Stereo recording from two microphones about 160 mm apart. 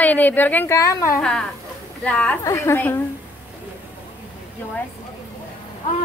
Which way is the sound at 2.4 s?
20° left (ahead or behind).